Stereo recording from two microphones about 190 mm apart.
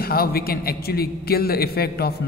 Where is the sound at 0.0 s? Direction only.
50° left (ahead or behind).